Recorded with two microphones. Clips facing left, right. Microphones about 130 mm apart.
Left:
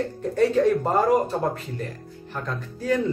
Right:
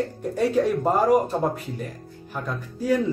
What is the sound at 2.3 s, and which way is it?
Speech, 10° right (ahead or behind).